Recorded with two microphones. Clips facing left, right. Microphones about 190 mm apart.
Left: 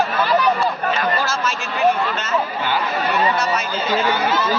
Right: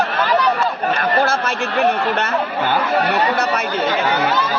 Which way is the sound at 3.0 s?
65° right (ahead or behind).